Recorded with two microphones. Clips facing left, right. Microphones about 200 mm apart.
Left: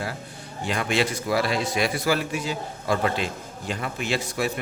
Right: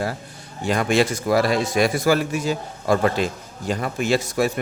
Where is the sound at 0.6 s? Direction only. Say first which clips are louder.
Right 5 dB; 45° right (ahead or behind).